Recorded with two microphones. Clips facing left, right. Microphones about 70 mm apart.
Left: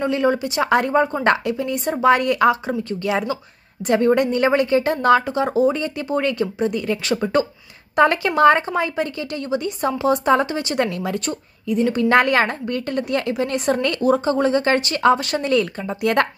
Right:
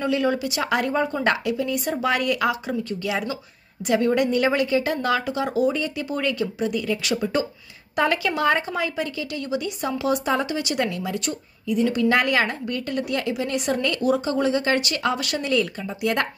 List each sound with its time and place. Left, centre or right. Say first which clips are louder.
0.0 s a woman's voice: left 3 dB; left